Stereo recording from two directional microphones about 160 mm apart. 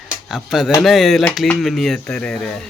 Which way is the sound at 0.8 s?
Centre (ahead or behind).